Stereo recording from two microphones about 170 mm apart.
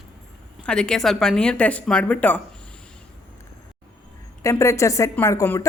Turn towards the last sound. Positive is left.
turn(degrees=15)  # may be behind; listen again after turning